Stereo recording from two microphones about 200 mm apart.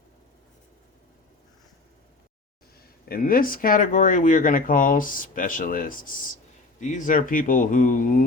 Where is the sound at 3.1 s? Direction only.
45° left (ahead or behind).